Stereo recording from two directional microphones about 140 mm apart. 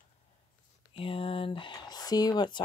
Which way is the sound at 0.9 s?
40° left (ahead or behind).